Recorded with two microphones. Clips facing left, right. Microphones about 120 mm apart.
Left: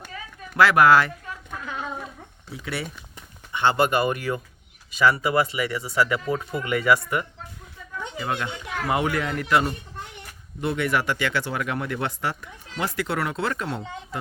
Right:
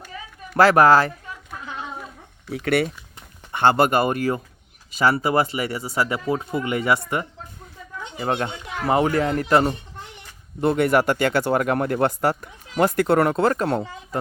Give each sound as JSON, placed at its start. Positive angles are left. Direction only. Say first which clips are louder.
{"t": 0.5, "sound": "speech", "louder": "right 2 dB", "side_deg": -40}
{"t": 2.5, "sound": "speech", "louder": "right 11 dB", "side_deg": -65}
{"t": 3.5, "sound": "speech", "louder": "right 3 dB", "side_deg": -45}